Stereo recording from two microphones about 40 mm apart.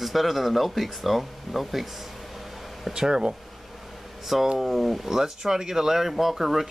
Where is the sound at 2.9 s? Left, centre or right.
Centre.